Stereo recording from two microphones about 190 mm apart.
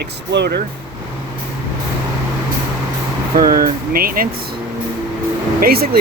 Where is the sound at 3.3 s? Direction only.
50° right (ahead or behind).